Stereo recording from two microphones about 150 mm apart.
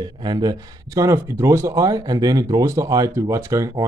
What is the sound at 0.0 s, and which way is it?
Speech, 30° right (ahead or behind).